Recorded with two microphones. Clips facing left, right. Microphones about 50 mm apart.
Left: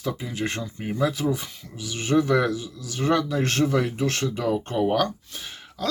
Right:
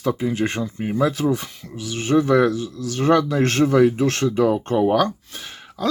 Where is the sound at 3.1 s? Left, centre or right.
Right.